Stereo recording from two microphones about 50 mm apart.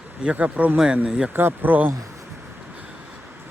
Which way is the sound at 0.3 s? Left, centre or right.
Right.